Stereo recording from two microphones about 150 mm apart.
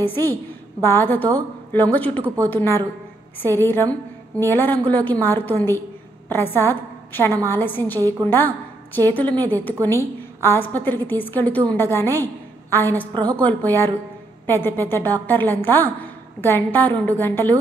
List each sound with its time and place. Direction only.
0.0 s a woman's voice: 15° left (ahead or behind)
2.2 s speech: 20° right (ahead or behind)
2.5 s a woman's voice: 15° left (ahead or behind)